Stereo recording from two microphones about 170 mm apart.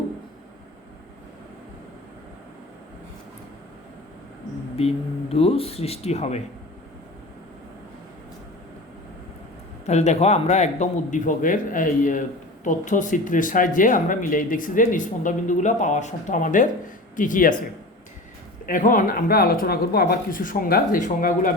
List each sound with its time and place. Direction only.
4.8 s speech: 35° left (ahead or behind)
9.8 s speech: 40° left (ahead or behind)
18.6 s speech: 55° left (ahead or behind)